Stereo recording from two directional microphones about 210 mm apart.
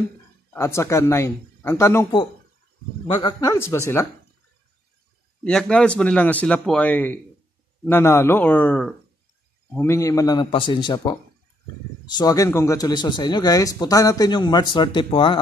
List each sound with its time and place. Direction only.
0.5 s speech: 10° left (ahead or behind)
3.2 s speech: 20° left (ahead or behind)
5.4 s a man's voice: 5° left (ahead or behind); by 15.4 s 25° left (ahead or behind)